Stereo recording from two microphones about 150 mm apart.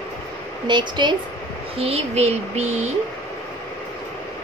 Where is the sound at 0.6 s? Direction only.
30° right (ahead or behind).